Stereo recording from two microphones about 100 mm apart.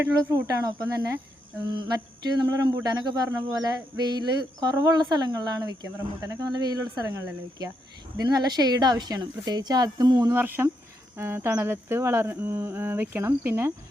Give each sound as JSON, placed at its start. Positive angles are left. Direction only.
{"t": 0.0, "sound": "speech", "side_deg": -30}
{"t": 1.7, "sound": "a sound", "side_deg": -45}
{"t": 3.2, "sound": "speech", "side_deg": -35}
{"t": 10.3, "sound": "speech", "side_deg": -20}